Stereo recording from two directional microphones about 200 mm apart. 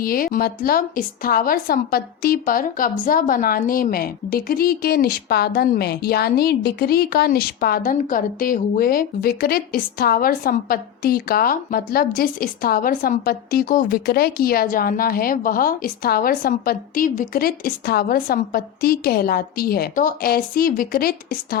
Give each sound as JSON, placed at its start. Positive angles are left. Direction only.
{"t": 0.0, "sound": "a woman's voice", "side_deg": 45}